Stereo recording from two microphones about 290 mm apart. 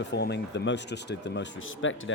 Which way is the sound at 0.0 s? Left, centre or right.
Left.